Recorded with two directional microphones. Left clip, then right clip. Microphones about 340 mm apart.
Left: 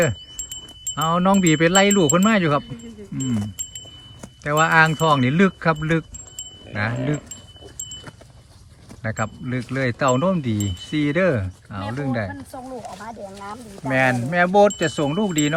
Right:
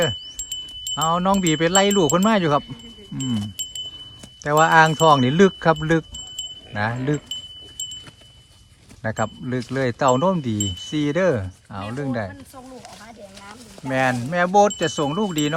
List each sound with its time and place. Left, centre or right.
0.9 s wind chime: centre
3.2 s speech: centre
4.4 s wind chime: centre
9.0 s wind chime: centre
12.7 s speech: centre
13.8 s wind chime: centre